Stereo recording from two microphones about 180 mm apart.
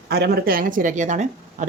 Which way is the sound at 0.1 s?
55° right (ahead or behind).